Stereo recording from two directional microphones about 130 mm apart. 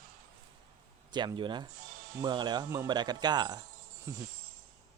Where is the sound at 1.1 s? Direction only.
35° right (ahead or behind).